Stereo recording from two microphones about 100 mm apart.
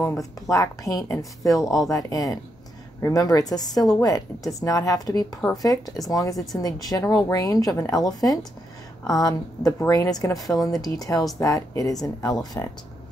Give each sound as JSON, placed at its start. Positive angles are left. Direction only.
{"t": 0.0, "sound": "speech", "side_deg": 30}
{"t": 6.3, "sound": "speech", "side_deg": 0}
{"t": 6.6, "sound": "speech", "side_deg": 40}